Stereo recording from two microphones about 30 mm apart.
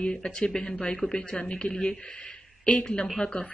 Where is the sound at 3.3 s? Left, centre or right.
Left.